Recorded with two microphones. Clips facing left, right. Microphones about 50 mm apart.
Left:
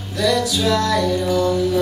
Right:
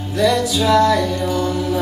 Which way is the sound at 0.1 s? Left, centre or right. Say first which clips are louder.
Right 2 dB; right.